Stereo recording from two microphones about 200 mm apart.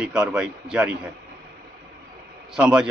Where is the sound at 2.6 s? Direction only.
5° right (ahead or behind).